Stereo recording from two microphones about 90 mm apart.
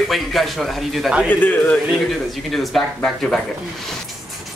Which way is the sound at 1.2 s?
15° left (ahead or behind).